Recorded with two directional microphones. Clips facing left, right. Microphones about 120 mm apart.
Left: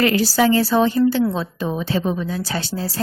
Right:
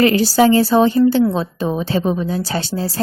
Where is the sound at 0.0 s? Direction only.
25° right (ahead or behind).